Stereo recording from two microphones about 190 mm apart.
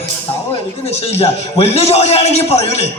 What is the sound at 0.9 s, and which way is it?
A man's voice, 35° left (ahead or behind).